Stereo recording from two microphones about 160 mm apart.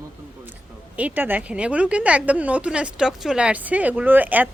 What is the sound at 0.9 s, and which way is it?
A woman's voice, 10° right (ahead or behind).